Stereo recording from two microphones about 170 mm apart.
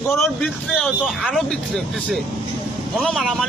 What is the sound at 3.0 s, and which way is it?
Speech, centre (ahead or behind).